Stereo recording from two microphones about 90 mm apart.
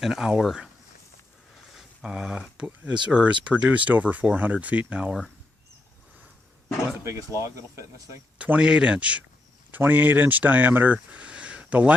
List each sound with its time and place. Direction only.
0.0 s speech: 5° right (ahead or behind)
7.3 s speech: 35° right (ahead or behind)
8.4 s speech: 15° right (ahead or behind)